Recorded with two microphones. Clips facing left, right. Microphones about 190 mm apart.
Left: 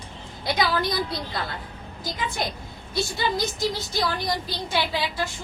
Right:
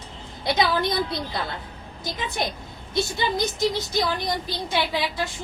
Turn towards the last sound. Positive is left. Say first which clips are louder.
# right 1 dB
turn(degrees=-20)  # may be behind; listen again after turning